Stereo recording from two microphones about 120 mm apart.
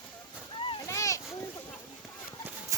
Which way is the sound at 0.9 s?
25° left (ahead or behind).